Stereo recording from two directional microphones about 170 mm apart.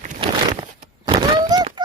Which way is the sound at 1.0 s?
25° right (ahead or behind).